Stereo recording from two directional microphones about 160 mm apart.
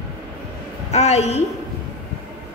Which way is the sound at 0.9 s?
40° left (ahead or behind).